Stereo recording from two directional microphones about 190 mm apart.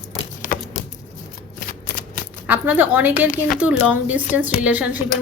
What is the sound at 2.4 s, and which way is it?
A woman's voice, 10° right (ahead or behind).